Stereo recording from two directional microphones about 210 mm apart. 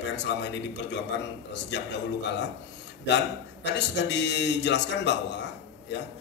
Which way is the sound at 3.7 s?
55° left (ahead or behind).